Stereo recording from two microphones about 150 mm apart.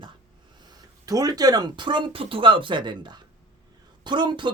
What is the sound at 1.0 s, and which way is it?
Speech, 25° right (ahead or behind).